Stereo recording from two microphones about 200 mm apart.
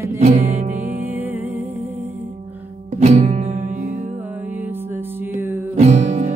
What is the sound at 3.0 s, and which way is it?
Music, 35° right (ahead or behind).